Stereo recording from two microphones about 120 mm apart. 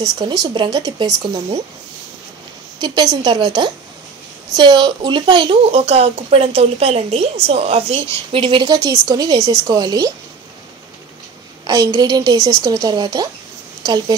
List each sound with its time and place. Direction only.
0.0 s a woman's voice: 30° right (ahead or behind)
2.8 s a woman's voice: 35° right (ahead or behind)
8.7 s a woman's voice: 30° right (ahead or behind)
11.6 s a woman's voice: 30° right (ahead or behind)